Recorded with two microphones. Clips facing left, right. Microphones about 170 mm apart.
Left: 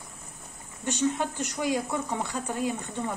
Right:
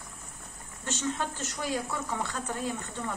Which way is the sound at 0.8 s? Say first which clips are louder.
Left 5 dB; 15° left (ahead or behind).